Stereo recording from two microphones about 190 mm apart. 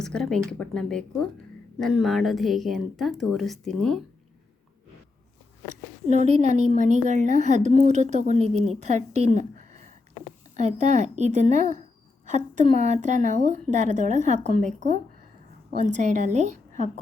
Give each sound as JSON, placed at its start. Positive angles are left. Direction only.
{"t": 0.0, "sound": "a woman's voice", "side_deg": 5}
{"t": 6.1, "sound": "a woman's voice", "side_deg": -35}